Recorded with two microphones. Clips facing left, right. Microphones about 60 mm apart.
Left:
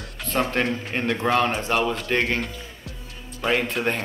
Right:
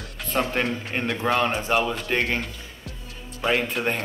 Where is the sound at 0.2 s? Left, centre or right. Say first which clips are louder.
Left 1 dB; centre.